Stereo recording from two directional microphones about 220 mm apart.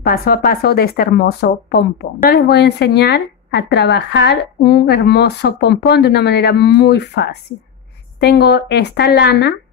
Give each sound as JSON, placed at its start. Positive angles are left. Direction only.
{"t": 0.0, "sound": "speech", "side_deg": 45}